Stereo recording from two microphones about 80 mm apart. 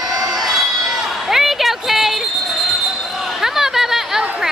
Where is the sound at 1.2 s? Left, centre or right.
Centre.